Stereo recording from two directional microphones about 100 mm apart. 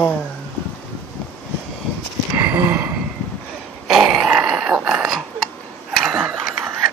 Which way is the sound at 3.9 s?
Centre (ahead or behind).